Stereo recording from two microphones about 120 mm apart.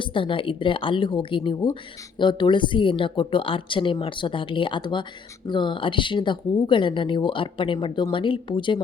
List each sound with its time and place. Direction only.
0.0 s speech: 45° left (ahead or behind)